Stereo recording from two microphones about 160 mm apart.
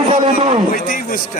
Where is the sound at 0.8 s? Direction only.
60° left (ahead or behind).